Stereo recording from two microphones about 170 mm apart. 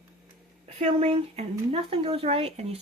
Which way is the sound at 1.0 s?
40° right (ahead or behind).